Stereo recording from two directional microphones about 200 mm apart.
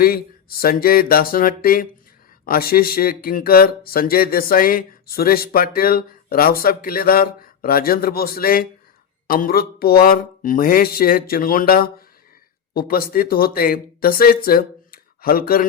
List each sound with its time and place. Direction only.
0.0 s speech: 50° left (ahead or behind)